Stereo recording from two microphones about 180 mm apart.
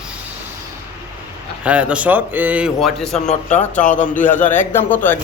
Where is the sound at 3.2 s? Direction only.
40° left (ahead or behind).